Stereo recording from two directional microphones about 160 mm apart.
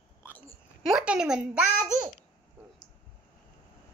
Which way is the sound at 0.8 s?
5° right (ahead or behind).